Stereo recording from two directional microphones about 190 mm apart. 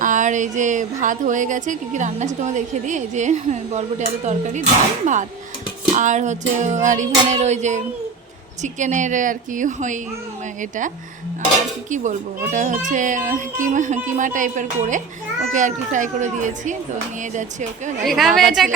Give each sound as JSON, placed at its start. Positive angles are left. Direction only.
{"t": 0.0, "sound": "speech", "side_deg": -40}
{"t": 18.0, "sound": "a woman's voice", "side_deg": 0}